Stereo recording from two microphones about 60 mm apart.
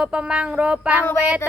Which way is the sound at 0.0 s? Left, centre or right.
Centre.